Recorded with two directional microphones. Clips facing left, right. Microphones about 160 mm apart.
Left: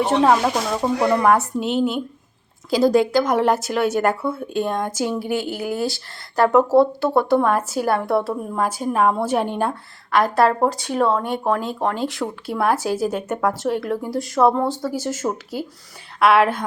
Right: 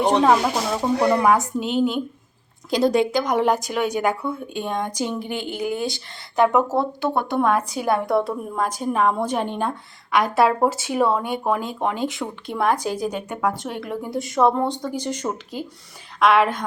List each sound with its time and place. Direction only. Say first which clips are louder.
0.0 s speech: left 1 dB; 5° left (ahead or behind)
4.1 s speech: left 2 dB; 15° right (ahead or behind)
4.6 s a woman's voice: left 2 dB; 5° left (ahead or behind)